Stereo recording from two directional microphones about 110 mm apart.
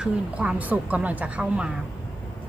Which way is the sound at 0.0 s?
10° right (ahead or behind).